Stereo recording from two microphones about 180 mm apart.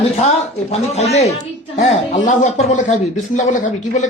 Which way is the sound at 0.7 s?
35° left (ahead or behind).